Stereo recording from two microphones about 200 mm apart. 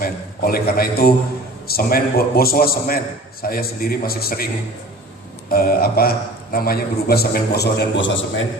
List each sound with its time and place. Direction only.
0.0 s a man's voice: 50° left (ahead or behind)
5.5 s a man's voice: 50° left (ahead or behind); by 8.4 s 65° left (ahead or behind)